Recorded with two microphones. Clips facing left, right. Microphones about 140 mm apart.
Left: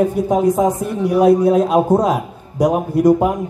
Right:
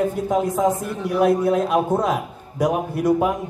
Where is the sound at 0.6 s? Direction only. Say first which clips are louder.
Left 4 dB; 15° left (ahead or behind).